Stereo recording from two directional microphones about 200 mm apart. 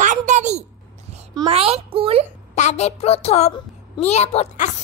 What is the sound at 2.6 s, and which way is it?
A child's voice, 35° left (ahead or behind).